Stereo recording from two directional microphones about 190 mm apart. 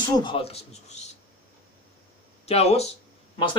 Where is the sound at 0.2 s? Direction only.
25° left (ahead or behind).